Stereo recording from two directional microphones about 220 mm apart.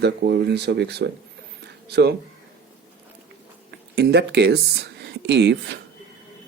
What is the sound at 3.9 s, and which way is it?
Speech, 45° right (ahead or behind).